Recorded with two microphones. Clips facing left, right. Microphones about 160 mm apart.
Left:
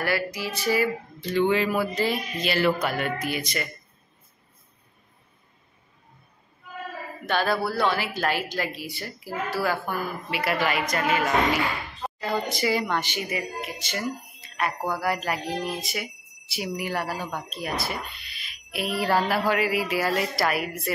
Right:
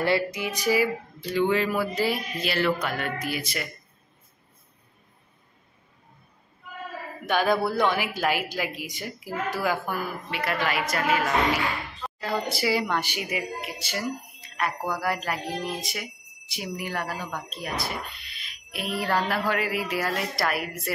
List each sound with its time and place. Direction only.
0.0 s music: 25° right (ahead or behind)
0.5 s speech: 10° right (ahead or behind)
1.5 s speech: centre (ahead or behind)
3.3 s speech: 5° right (ahead or behind)
7.2 s speech: 15° right (ahead or behind)
10.3 s speech: 5° left (ahead or behind)
14.6 s speech: centre (ahead or behind)